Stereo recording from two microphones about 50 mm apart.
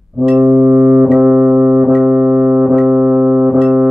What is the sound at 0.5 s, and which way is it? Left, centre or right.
Music, right.